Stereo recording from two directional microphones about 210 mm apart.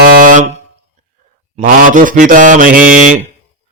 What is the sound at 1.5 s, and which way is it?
Mantra, 40° right (ahead or behind).